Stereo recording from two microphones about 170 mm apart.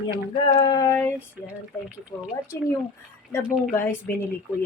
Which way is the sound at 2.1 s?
25° left (ahead or behind).